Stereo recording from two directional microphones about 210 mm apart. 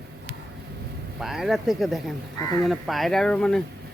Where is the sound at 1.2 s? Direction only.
Centre (ahead or behind).